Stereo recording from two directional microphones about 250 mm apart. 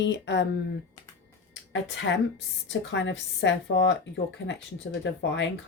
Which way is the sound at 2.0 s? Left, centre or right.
Left.